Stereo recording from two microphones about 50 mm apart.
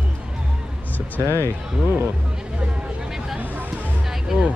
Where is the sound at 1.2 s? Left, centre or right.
Left.